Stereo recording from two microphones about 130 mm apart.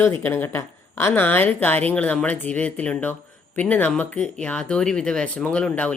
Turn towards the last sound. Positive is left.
turn(degrees=10)  # may be behind; listen again after turning